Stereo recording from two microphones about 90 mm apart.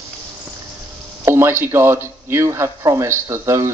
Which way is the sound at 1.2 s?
25° right (ahead or behind).